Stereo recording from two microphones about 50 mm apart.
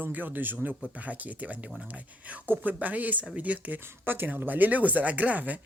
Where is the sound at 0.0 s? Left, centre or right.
Right.